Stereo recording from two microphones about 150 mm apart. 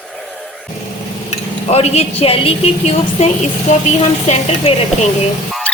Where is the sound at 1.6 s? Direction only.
45° left (ahead or behind).